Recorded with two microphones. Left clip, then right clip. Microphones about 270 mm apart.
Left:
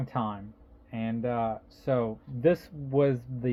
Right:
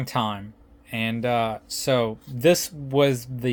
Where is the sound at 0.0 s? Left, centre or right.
Right.